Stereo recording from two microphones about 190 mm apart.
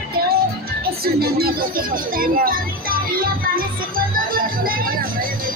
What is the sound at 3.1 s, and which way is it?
Music, 50° right (ahead or behind).